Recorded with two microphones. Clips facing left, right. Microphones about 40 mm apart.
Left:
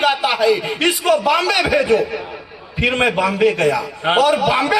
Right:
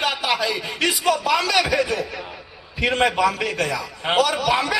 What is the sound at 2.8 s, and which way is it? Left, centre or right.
A man's voice, left.